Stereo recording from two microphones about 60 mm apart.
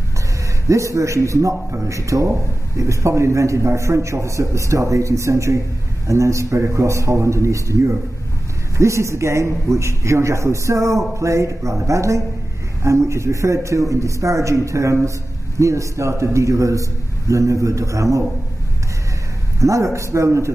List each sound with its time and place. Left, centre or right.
0.7 s a man's voice: right
19.6 s a man's voice: right